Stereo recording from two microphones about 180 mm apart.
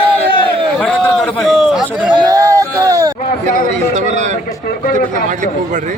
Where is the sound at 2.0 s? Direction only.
25° right (ahead or behind).